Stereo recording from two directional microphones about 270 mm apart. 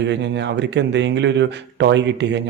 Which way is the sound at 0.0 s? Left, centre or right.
Right.